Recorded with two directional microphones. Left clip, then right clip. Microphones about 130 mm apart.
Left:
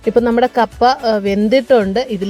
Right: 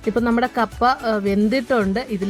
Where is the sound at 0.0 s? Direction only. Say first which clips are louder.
Left 7 dB; 30° left (ahead or behind).